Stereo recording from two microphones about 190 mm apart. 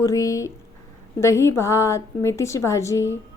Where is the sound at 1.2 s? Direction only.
15° left (ahead or behind).